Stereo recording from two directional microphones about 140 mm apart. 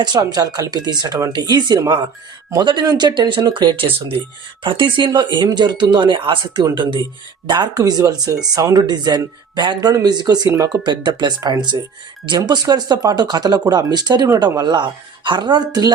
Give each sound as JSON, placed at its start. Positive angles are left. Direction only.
{"t": 0.0, "sound": "speech", "side_deg": -30}